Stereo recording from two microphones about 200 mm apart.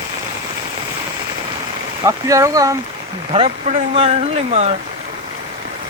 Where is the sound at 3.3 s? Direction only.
25° right (ahead or behind).